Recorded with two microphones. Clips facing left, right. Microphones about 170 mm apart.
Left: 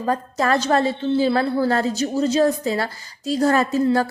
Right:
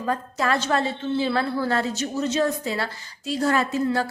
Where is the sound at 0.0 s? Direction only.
40° left (ahead or behind).